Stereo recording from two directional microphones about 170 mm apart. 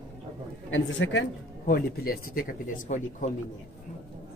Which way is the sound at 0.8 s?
90° left.